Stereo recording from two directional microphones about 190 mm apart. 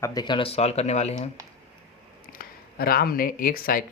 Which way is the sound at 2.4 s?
50° left (ahead or behind).